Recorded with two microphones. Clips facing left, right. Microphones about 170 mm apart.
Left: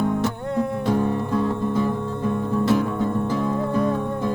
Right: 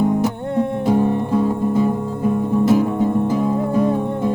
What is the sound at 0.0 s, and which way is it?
Music, 20° right (ahead or behind).